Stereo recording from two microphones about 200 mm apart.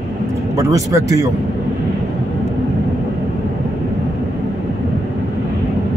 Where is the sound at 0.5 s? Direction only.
15° right (ahead or behind).